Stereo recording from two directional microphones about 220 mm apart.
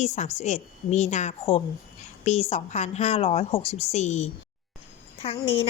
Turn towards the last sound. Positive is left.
turn(degrees=25)  # may be behind; listen again after turning